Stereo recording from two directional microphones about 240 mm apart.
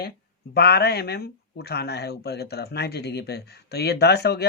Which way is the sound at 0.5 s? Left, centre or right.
Left.